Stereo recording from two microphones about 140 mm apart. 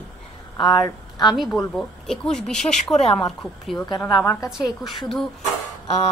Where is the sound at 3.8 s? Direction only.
30° left (ahead or behind).